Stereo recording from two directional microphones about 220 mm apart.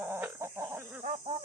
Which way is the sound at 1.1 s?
25° right (ahead or behind).